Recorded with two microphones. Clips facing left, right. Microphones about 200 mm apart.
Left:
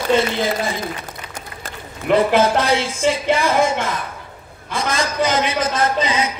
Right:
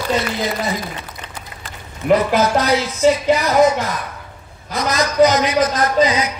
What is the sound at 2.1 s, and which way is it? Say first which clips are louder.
Speech: left 2 dB; 30° left (ahead or behind).